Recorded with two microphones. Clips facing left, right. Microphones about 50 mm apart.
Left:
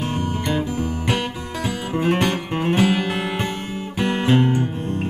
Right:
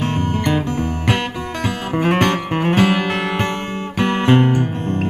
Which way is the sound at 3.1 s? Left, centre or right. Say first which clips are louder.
Right 3 dB; right.